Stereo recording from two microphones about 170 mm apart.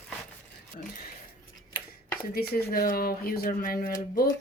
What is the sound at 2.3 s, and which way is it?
Speech, 65° left (ahead or behind).